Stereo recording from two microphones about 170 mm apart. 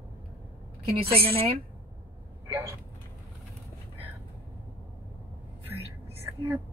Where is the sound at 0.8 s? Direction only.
35° right (ahead or behind).